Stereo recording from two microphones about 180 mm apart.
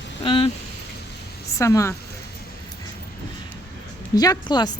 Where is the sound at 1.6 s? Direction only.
15° left (ahead or behind).